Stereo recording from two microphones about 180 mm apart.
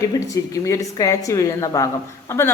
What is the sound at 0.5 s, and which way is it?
A man's voice, 15° left (ahead or behind).